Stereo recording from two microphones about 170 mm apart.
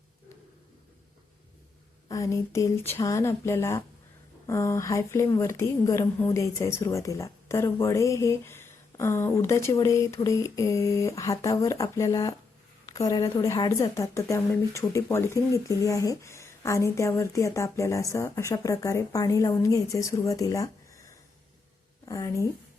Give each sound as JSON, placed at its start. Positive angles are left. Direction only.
{"t": 2.0, "sound": "speech", "side_deg": 20}
{"t": 22.0, "sound": "speech", "side_deg": 20}